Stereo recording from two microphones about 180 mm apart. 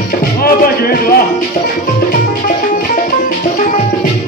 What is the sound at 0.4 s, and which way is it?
Music, 55° left (ahead or behind).